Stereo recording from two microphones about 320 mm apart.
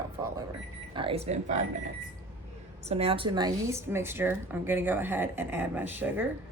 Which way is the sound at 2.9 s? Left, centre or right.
Centre.